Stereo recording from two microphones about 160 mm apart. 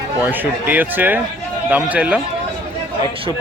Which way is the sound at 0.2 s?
10° right (ahead or behind).